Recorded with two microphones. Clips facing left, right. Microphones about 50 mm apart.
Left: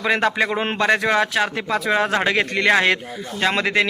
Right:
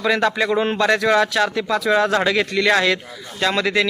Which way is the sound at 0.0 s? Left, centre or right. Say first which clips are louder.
Right 1 dB; left.